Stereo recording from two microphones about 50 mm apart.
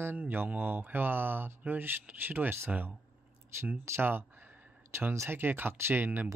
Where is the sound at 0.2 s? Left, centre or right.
Right.